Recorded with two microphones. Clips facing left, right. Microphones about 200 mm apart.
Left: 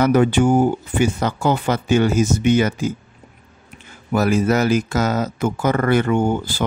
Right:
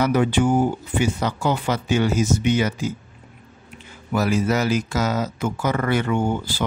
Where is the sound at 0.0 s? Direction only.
50° left (ahead or behind).